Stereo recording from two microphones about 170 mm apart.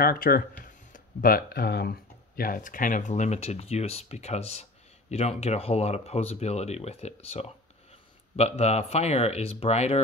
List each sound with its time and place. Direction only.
0.0 s speech: 60° left (ahead or behind); by 10.0 s 40° left (ahead or behind)